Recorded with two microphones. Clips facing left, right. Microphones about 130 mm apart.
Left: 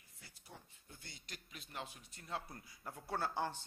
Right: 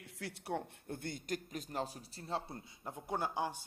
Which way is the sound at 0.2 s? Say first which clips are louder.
Right 19 dB; 75° right (ahead or behind).